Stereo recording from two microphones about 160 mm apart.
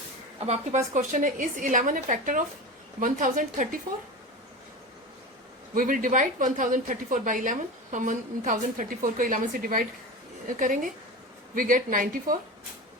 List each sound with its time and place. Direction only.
0.3 s a woman's voice: 45° right (ahead or behind)
5.7 s a woman's voice: 60° right (ahead or behind)
11.5 s a woman's voice: 55° right (ahead or behind)